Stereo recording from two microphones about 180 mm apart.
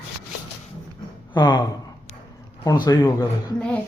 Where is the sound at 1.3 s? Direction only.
25° left (ahead or behind).